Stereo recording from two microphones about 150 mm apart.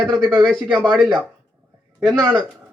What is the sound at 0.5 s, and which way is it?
A man's voice, 5° left (ahead or behind).